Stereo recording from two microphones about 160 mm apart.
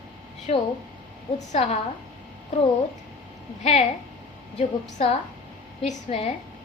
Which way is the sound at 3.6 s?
45° left (ahead or behind).